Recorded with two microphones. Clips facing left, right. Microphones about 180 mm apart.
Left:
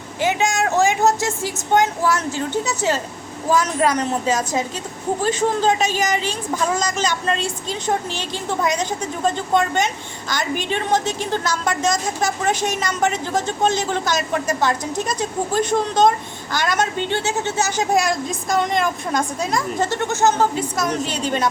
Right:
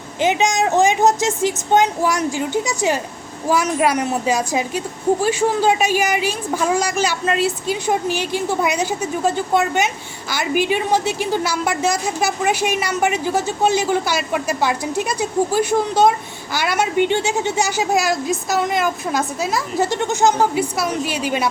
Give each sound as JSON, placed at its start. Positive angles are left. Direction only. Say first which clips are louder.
{"t": 0.2, "sound": "a woman's voice", "louder": "right 2 dB", "side_deg": -20}